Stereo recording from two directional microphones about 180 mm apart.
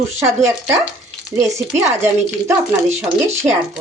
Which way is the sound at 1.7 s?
15° right (ahead or behind).